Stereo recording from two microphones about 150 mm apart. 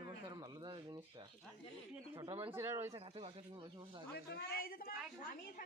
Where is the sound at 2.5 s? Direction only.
15° right (ahead or behind).